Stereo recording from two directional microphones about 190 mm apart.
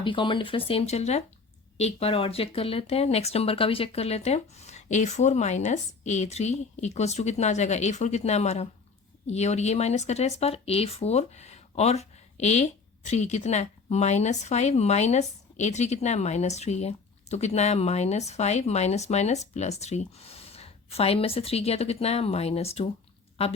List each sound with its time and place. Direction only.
0.0 s speech: 25° left (ahead or behind)